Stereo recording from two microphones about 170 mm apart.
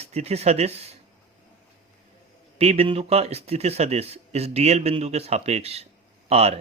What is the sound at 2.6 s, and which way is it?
Speech, 35° right (ahead or behind).